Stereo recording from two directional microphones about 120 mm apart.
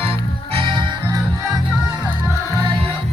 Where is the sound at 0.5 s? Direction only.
40° right (ahead or behind).